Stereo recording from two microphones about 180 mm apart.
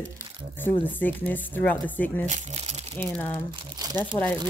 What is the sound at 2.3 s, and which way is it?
Crumpling, 40° right (ahead or behind).